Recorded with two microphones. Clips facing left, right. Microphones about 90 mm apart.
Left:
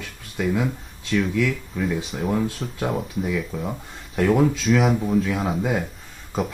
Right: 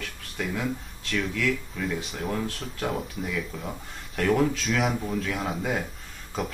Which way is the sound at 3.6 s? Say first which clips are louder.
Left 5 dB; 15° left (ahead or behind).